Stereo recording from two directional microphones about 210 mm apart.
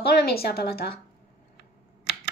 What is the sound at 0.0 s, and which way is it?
Speech, 50° left (ahead or behind).